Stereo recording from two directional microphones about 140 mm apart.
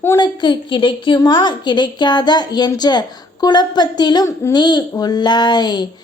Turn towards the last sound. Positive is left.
turn(degrees=30)  # may be behind; listen again after turning